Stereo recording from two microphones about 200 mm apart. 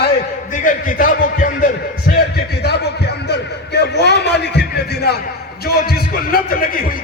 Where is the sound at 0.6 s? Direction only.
40° left (ahead or behind).